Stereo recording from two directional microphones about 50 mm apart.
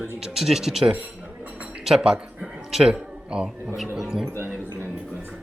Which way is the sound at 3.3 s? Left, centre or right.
Centre.